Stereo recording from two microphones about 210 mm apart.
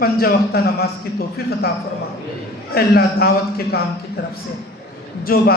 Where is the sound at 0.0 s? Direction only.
45° left (ahead or behind).